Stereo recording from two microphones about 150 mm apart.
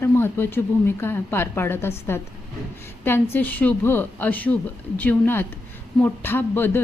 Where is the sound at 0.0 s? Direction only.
15° left (ahead or behind).